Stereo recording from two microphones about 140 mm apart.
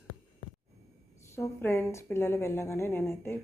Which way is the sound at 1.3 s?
15° left (ahead or behind).